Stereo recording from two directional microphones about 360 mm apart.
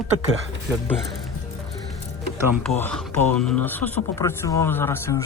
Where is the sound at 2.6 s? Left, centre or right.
Centre.